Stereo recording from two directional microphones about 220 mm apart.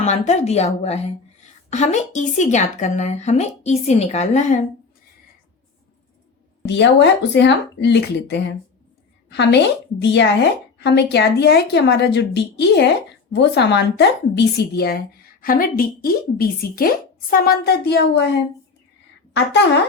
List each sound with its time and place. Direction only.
0.0 s a woman's voice: 30° left (ahead or behind)
6.7 s a woman's voice: 50° left (ahead or behind)
19.3 s a woman's voice: 50° left (ahead or behind)